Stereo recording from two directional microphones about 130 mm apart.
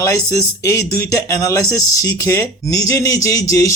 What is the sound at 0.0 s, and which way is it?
Speech, 20° left (ahead or behind).